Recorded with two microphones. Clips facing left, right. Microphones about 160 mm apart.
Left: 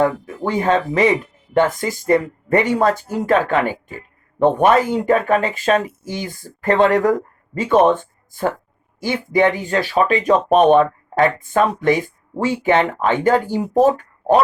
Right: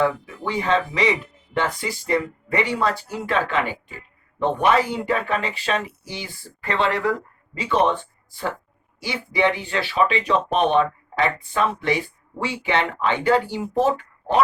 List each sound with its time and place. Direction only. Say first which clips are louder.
0.0 s speech: left 4 dB; 45° left (ahead or behind)